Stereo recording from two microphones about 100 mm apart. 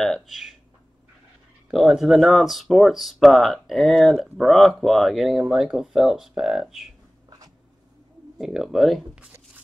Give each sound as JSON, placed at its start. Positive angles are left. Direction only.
{"t": 0.0, "sound": "speech", "side_deg": 0}
{"t": 1.7, "sound": "speech", "side_deg": 0}
{"t": 7.2, "sound": "a sound", "side_deg": -40}
{"t": 8.4, "sound": "speech", "side_deg": -5}
{"t": 9.1, "sound": "speech", "side_deg": -10}